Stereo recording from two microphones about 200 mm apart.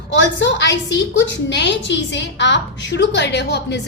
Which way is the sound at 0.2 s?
65° left (ahead or behind).